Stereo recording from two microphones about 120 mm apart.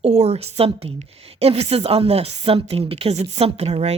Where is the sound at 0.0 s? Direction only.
60° right (ahead or behind).